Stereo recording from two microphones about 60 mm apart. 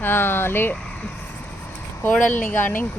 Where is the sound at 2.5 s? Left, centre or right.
Left.